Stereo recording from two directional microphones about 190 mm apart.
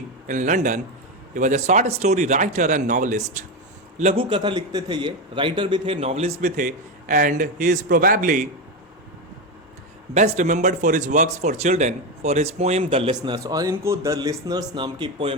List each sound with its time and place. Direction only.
0.3 s speech: 40° right (ahead or behind)
10.2 s speech: 40° right (ahead or behind)